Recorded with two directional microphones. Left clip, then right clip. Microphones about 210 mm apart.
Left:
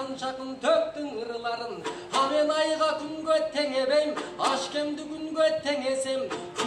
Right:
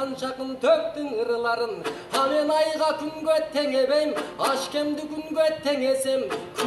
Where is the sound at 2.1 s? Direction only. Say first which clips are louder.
Right 2 dB; 50° right (ahead or behind).